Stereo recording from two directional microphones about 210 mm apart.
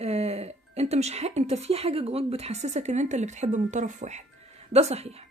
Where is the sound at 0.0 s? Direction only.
30° right (ahead or behind).